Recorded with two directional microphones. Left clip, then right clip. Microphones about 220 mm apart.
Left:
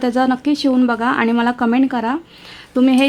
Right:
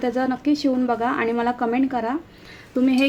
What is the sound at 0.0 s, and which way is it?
A woman's voice, 45° left (ahead or behind).